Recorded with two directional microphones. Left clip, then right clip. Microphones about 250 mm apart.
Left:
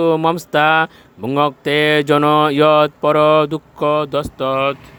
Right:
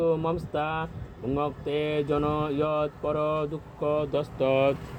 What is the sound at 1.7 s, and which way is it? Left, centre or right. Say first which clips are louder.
Speech: left 14 dB; left.